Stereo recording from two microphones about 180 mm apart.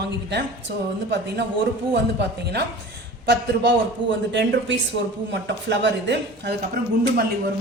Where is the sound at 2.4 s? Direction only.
65° right (ahead or behind).